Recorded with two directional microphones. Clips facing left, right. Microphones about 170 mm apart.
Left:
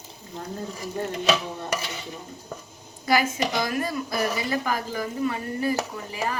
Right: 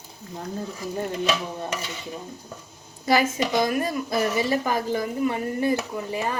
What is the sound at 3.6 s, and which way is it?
A woman's voice, 20° right (ahead or behind).